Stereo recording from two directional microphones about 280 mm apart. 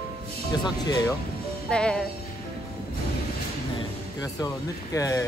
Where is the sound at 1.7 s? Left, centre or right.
Centre.